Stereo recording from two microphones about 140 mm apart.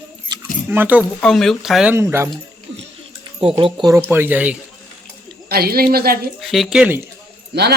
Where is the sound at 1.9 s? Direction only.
15° right (ahead or behind).